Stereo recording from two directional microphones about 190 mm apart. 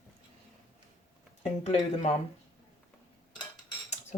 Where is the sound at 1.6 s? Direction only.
35° left (ahead or behind).